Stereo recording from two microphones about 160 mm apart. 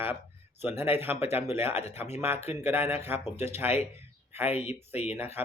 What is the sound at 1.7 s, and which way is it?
Speech, 40° left (ahead or behind).